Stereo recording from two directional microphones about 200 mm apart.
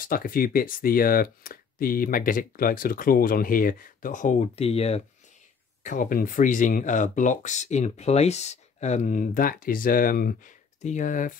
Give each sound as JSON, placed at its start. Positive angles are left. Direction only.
{"t": 0.0, "sound": "speech", "side_deg": 45}
{"t": 5.9, "sound": "speech", "side_deg": 45}